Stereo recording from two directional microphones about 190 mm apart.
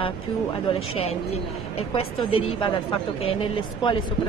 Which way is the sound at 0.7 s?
30° left (ahead or behind).